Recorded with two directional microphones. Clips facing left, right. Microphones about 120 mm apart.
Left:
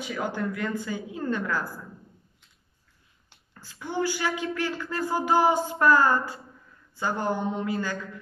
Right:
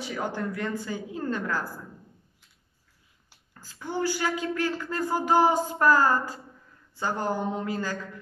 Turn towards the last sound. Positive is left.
turn(degrees=-40)  # may be behind; listen again after turning